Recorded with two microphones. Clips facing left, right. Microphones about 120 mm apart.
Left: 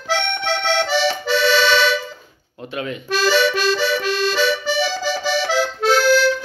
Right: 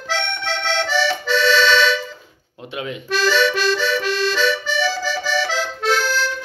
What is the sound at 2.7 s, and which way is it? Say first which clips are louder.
Speech: left 1 dB; 15° right (ahead or behind).